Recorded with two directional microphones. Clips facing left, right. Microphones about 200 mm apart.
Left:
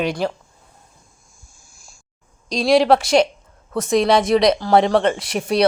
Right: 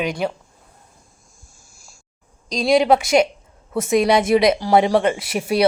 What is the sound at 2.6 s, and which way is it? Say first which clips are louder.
Speech: left 1 dB; centre (ahead or behind).